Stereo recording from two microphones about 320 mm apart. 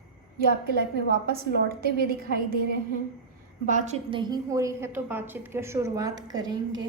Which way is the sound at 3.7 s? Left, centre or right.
Right.